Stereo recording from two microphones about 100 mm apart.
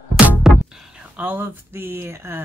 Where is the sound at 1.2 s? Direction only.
20° right (ahead or behind).